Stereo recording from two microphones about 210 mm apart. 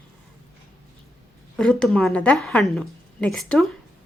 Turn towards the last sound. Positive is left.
turn(degrees=0)  # may be behind; listen again after turning